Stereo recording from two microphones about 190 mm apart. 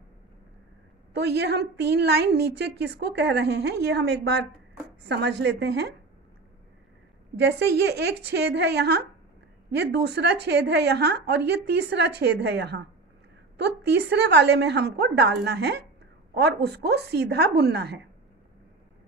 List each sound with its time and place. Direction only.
1.1 s a woman's voice: 60° right (ahead or behind)
7.3 s a woman's voice: 65° right (ahead or behind)